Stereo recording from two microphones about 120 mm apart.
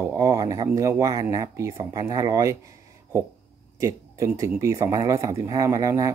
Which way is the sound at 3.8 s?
25° right (ahead or behind).